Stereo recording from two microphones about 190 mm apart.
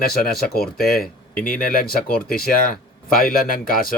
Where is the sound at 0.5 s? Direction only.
55° left (ahead or behind).